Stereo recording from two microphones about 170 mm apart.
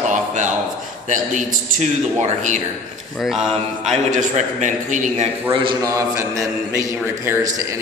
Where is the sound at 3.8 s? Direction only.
45° right (ahead or behind).